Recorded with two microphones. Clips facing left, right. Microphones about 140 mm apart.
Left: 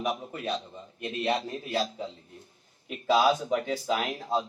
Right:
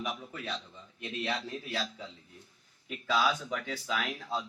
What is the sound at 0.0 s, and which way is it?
A man's voice, 25° left (ahead or behind).